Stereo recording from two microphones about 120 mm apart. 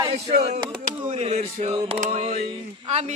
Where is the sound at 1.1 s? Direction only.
65° right (ahead or behind).